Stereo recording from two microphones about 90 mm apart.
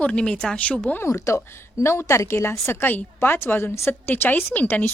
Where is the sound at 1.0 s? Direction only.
35° left (ahead or behind).